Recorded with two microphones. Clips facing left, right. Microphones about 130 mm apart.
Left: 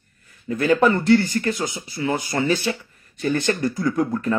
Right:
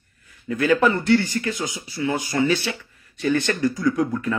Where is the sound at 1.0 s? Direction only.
40° left (ahead or behind).